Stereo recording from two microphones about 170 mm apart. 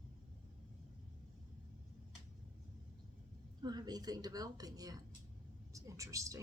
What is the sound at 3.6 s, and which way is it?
A woman's voice, 25° right (ahead or behind).